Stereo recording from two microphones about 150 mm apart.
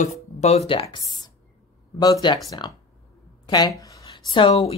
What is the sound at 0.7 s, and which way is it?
Speech, 35° left (ahead or behind).